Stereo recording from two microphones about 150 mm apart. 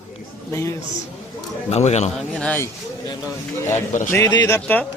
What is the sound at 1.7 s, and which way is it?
Speech, 45° left (ahead or behind).